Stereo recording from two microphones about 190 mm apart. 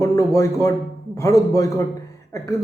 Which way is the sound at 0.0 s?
15° left (ahead or behind).